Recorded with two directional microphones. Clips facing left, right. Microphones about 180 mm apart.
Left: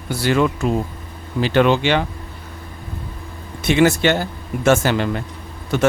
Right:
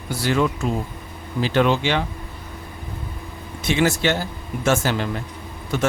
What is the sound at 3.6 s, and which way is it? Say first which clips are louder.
Speech: left 5 dB; 65° left (ahead or behind).